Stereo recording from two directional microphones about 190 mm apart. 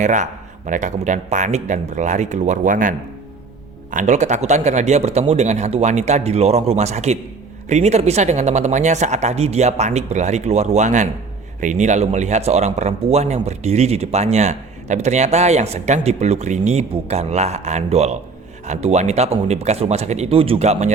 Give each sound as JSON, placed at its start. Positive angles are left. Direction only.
{"t": 0.0, "sound": "speech", "side_deg": -40}
{"t": 3.9, "sound": "speech", "side_deg": -40}